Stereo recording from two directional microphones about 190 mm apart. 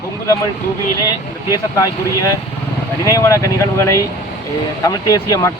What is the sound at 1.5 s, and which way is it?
Speech, 20° left (ahead or behind).